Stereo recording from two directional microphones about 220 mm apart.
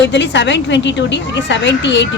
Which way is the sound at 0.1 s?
55° left (ahead or behind).